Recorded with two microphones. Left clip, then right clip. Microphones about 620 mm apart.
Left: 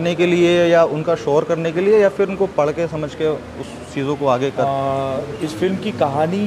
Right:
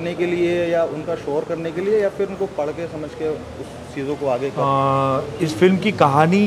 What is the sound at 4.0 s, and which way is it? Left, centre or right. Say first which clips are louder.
Speech: left 4 dB; left.